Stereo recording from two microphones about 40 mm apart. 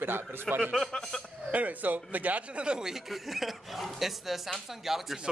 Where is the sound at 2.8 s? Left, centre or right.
Centre.